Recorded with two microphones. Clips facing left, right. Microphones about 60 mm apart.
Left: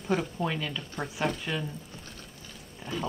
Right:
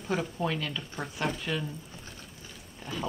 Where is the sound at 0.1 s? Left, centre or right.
Centre.